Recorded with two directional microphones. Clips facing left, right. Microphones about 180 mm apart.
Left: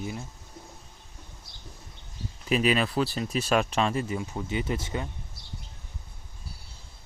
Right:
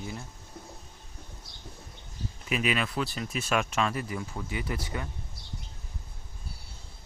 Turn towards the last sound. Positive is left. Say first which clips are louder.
# left 4 dB
turn(degrees=25)  # may be behind; listen again after turning